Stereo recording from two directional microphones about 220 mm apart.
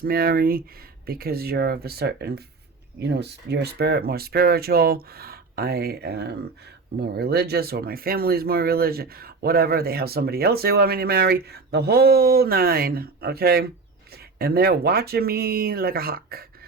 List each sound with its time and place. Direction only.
0.0 s speech: 45° right (ahead or behind)